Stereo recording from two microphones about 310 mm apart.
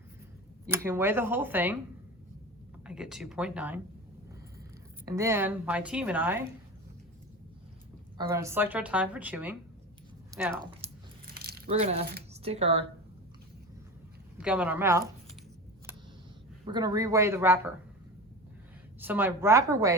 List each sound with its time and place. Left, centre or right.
0.9 s a woman's voice: centre
2.8 s a woman's voice: centre
5.0 s a woman's voice: centre
8.2 s a woman's voice: centre
11.3 s biting: right
11.7 s speech: centre
14.4 s speech: centre
16.6 s a woman's voice: centre
18.9 s a woman's voice: centre